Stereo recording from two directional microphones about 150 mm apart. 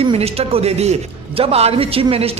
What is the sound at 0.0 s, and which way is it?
A man's voice, 40° right (ahead or behind).